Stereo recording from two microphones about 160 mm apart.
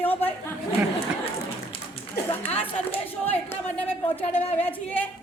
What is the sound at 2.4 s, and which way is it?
Speech, 40° left (ahead or behind).